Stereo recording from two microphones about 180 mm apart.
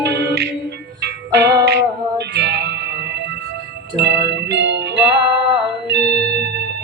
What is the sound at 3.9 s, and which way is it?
Music, 75° right (ahead or behind).